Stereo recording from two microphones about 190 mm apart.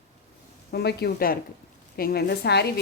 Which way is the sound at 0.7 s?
55° left (ahead or behind).